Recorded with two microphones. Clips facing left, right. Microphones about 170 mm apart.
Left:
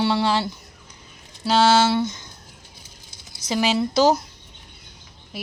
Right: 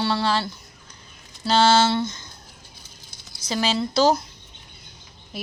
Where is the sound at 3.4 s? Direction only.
15° left (ahead or behind).